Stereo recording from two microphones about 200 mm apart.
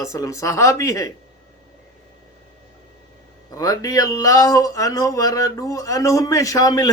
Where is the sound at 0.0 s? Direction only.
15° left (ahead or behind).